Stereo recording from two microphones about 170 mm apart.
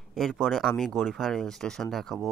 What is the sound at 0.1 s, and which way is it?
Speech, centre (ahead or behind).